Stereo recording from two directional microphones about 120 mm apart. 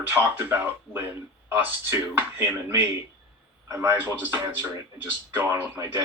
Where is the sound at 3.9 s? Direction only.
15° right (ahead or behind).